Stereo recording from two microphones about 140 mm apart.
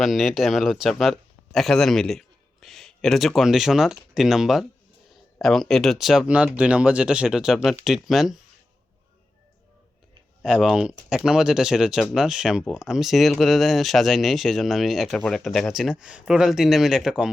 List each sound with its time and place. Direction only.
0.0 s a man's voice: centre (ahead or behind)
10.4 s speech: 5° right (ahead or behind)